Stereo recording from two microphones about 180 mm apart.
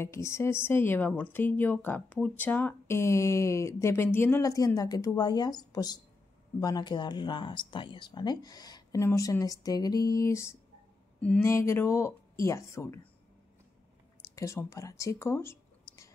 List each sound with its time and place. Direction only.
0.0 s a woman's voice: 15° left (ahead or behind)
14.3 s a woman's voice: 15° left (ahead or behind)